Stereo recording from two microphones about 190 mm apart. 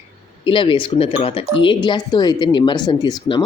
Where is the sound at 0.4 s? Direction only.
25° left (ahead or behind).